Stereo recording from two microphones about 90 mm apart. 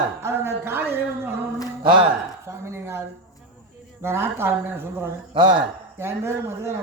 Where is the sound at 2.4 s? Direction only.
30° right (ahead or behind).